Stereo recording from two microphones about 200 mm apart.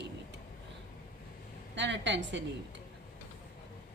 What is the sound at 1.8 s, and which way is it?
Speech, 65° right (ahead or behind).